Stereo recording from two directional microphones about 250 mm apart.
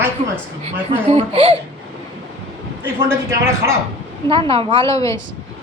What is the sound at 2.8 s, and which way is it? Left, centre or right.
Speech, centre.